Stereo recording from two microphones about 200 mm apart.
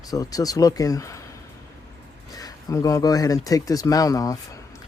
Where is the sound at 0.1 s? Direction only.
20° left (ahead or behind).